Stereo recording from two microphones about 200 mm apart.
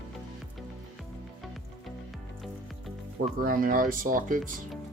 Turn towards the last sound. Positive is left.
turn(degrees=-45)  # may be behind; listen again after turning